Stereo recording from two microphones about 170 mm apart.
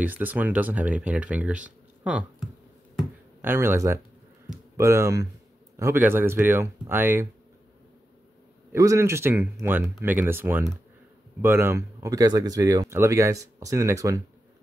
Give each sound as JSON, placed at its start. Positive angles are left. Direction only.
{"t": 0.0, "sound": "speech", "side_deg": -10}
{"t": 3.4, "sound": "speech", "side_deg": -15}
{"t": 8.7, "sound": "speech", "side_deg": -15}